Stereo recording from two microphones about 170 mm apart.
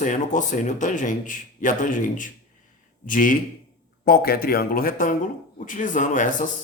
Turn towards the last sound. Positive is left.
turn(degrees=50)  # may be behind; listen again after turning